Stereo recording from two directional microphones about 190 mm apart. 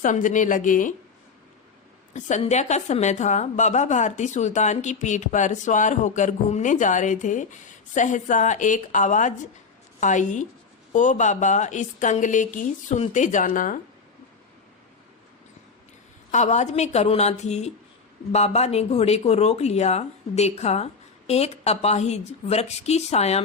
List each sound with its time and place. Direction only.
0.0 s a woman's voice: 40° left (ahead or behind)
2.1 s a woman's voice: 40° left (ahead or behind)
16.3 s a woman's voice: 40° left (ahead or behind)